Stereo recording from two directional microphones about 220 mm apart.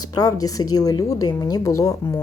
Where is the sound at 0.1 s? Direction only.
15° left (ahead or behind).